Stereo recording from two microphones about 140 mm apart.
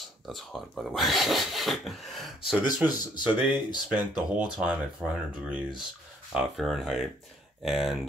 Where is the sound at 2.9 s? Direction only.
30° left (ahead or behind).